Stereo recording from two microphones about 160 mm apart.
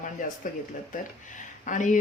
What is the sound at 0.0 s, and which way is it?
Speech, 55° left (ahead or behind).